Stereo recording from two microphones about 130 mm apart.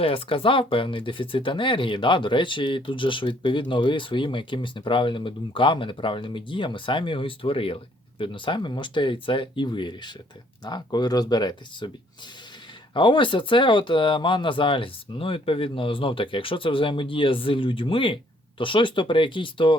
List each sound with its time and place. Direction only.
0.0 s speech: 45° left (ahead or behind)
12.9 s speech: 40° left (ahead or behind)